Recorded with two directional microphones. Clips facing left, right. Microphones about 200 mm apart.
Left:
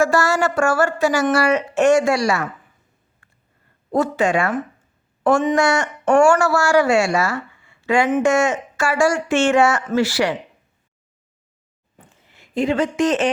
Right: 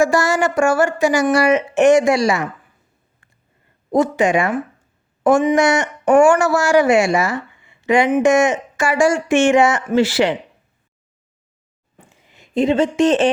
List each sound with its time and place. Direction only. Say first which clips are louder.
0.0 s speech: right 2 dB; 15° right (ahead or behind)
3.9 s speech: right 3 dB; 15° right (ahead or behind)
11.9 s a sound: right 2 dB; 15° right (ahead or behind); by 13.3 s 30° right (ahead or behind)